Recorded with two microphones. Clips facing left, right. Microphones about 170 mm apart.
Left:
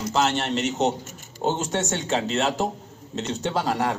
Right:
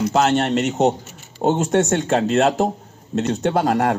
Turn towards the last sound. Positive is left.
turn(degrees=-55)  # may be behind; listen again after turning